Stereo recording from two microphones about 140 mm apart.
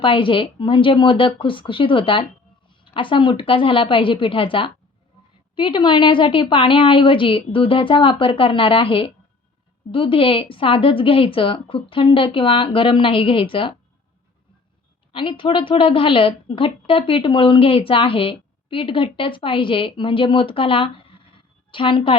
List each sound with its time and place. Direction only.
0.0 s speech: 35° left (ahead or behind)
15.1 s speech: 35° left (ahead or behind)